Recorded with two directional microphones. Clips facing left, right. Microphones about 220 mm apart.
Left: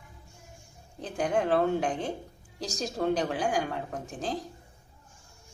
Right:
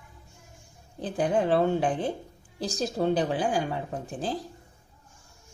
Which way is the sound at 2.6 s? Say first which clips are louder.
Right 3 dB; 30° right (ahead or behind).